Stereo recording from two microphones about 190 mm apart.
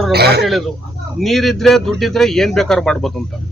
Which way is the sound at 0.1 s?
60° right (ahead or behind).